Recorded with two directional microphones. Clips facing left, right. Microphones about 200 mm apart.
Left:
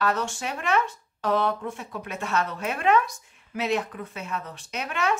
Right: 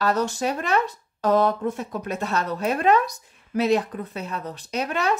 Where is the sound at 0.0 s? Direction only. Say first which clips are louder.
Right 4 dB; 40° right (ahead or behind).